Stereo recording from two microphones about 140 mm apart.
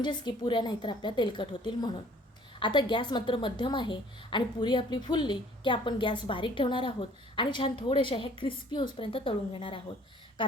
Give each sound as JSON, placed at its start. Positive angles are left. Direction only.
{"t": 0.0, "sound": "a woman's voice", "side_deg": 35}